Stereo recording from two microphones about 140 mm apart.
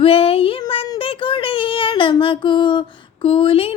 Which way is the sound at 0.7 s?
40° left (ahead or behind).